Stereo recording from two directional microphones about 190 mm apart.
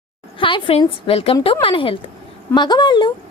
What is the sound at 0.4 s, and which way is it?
A woman's voice, 30° left (ahead or behind).